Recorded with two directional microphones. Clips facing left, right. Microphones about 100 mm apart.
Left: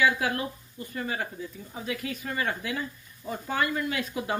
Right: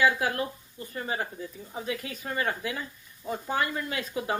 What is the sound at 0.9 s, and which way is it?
Speech, 25° right (ahead or behind).